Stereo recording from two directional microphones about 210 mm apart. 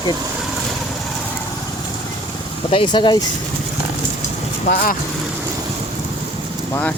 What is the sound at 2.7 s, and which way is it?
Speech, 20° left (ahead or behind).